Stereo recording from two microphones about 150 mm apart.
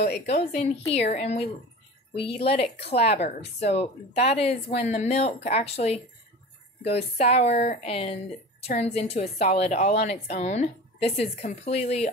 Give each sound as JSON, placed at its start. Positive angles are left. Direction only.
{"t": 0.3, "sound": "a woman's voice", "side_deg": 45}